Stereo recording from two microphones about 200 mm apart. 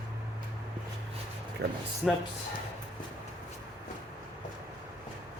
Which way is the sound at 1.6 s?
60° right (ahead or behind).